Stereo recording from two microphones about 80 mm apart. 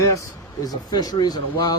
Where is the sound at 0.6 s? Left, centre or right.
Left.